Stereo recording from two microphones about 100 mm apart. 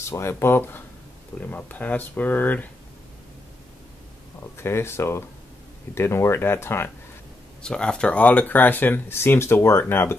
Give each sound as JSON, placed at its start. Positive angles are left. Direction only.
{"t": 0.0, "sound": "speech", "side_deg": 30}
{"t": 4.6, "sound": "speech", "side_deg": 25}
{"t": 7.6, "sound": "speech", "side_deg": 10}